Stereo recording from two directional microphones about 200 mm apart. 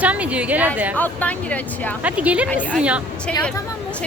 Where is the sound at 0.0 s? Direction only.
5° right (ahead or behind).